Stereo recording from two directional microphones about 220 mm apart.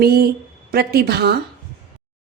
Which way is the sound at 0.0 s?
45° right (ahead or behind).